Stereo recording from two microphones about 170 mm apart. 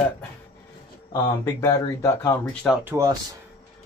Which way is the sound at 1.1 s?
20° left (ahead or behind).